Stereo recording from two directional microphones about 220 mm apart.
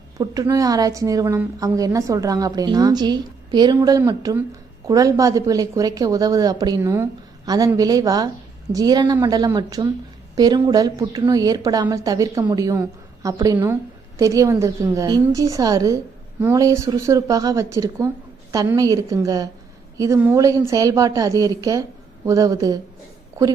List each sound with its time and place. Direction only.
0.2 s a woman's voice: 15° right (ahead or behind)